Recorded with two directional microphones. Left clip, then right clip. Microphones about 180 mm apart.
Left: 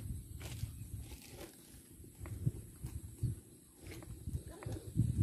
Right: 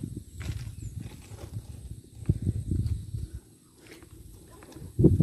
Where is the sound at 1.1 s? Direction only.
20° left (ahead or behind).